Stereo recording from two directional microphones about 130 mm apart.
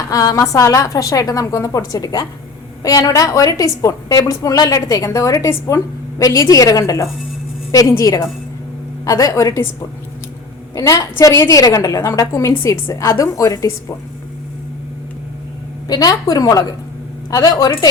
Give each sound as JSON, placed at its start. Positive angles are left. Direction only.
{"t": 0.1, "sound": "a woman's voice", "side_deg": 25}
{"t": 10.8, "sound": "a woman's voice", "side_deg": 25}
{"t": 15.9, "sound": "a woman's voice", "side_deg": 30}